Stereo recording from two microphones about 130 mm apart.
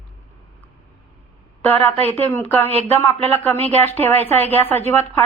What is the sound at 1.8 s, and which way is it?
Speech, 50° right (ahead or behind).